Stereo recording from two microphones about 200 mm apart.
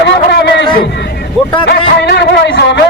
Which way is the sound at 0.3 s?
55° left (ahead or behind).